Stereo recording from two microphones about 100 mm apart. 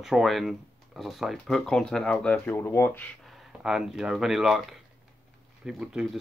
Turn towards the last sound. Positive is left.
turn(degrees=-10)  # may be behind; listen again after turning